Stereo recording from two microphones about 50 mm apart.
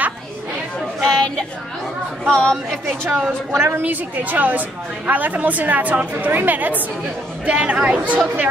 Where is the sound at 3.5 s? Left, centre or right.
Right.